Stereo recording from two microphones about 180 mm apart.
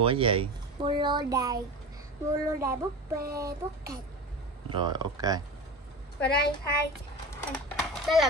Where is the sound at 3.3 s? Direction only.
20° right (ahead or behind).